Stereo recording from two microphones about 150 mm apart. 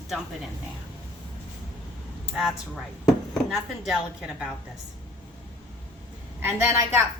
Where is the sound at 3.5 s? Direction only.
5° right (ahead or behind).